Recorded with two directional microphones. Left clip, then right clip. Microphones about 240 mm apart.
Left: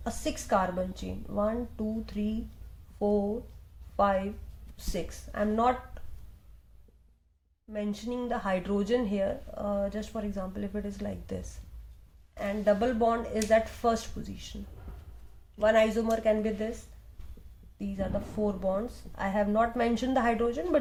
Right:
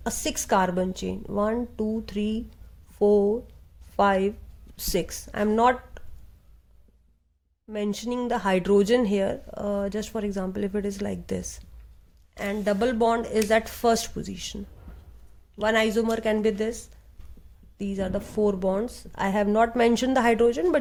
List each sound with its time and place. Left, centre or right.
0.0 s speech: right
7.7 s a woman's voice: right
17.7 s speech: right